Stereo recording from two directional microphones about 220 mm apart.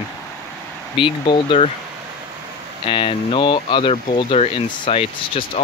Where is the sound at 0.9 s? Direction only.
20° left (ahead or behind).